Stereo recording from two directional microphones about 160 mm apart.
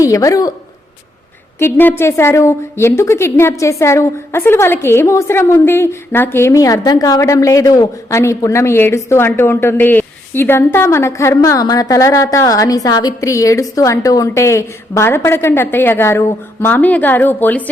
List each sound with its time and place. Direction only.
0.1 s a woman's voice: 20° left (ahead or behind)
1.5 s a woman's voice: 15° left (ahead or behind)